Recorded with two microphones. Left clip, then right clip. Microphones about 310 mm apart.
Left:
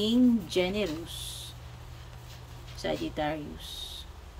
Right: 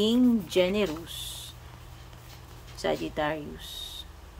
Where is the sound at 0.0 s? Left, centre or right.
Centre.